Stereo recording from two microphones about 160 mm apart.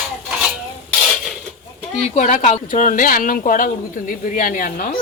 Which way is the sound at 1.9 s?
45° left (ahead or behind).